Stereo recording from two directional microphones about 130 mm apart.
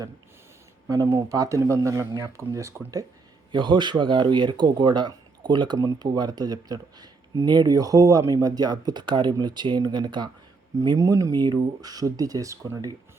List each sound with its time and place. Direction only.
1.0 s speech: 25° right (ahead or behind)
3.5 s speech: 40° right (ahead or behind)